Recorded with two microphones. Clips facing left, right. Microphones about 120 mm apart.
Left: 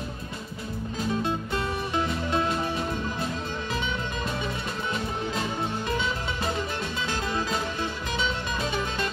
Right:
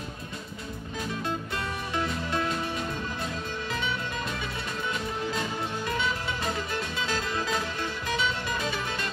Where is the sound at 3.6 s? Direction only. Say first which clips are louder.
Even; 20° left (ahead or behind).